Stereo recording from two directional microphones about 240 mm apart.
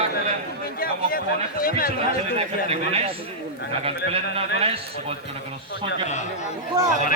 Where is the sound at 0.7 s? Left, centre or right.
Left.